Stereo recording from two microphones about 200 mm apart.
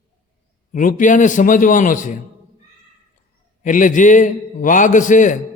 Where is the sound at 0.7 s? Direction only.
40° left (ahead or behind).